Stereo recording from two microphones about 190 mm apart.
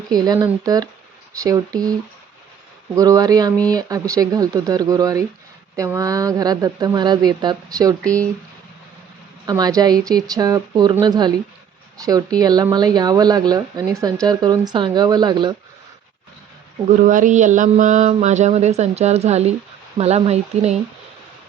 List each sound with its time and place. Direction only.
0.1 s speech: 20° right (ahead or behind)
9.5 s speech: 20° right (ahead or behind)
17.1 s a sound: 40° right (ahead or behind)